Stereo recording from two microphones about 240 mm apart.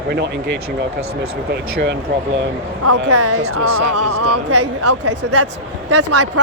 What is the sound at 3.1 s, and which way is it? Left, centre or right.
A woman's voice, right.